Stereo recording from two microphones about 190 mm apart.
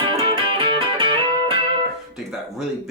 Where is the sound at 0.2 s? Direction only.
25° right (ahead or behind).